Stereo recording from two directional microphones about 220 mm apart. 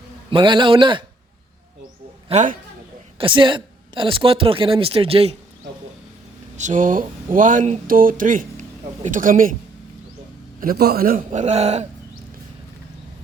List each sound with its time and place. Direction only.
0.3 s speech: 20° right (ahead or behind)
2.3 s speech: 35° right (ahead or behind)
3.2 s speech: 20° right (ahead or behind)
6.6 s speech: 35° right (ahead or behind)
10.6 s speech: 45° right (ahead or behind)